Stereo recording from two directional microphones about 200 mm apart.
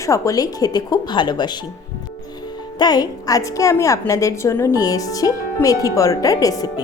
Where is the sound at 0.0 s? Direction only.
15° left (ahead or behind).